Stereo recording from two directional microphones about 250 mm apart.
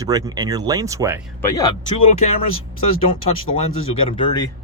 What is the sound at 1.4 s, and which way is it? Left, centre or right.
Speech, centre.